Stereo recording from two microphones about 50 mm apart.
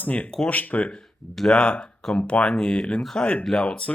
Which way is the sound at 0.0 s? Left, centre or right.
Left.